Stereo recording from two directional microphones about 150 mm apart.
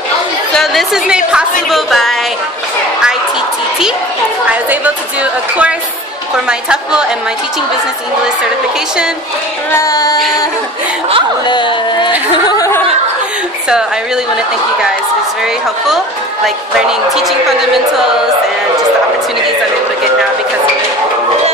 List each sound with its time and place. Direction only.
0.6 s a woman's voice: centre (ahead or behind)
4.5 s a woman's voice: 10° right (ahead or behind)
9.7 s female singing: 20° left (ahead or behind)
11.4 s speech: 30° left (ahead or behind)
12.4 s a sound: 20° left (ahead or behind)
13.7 s a woman's voice: 5° right (ahead or behind)
17.1 s a woman's voice: centre (ahead or behind)